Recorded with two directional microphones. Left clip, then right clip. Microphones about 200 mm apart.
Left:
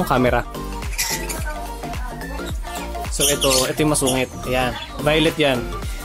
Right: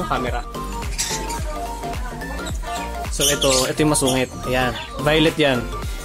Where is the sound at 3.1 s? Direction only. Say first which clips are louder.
Even; centre (ahead or behind).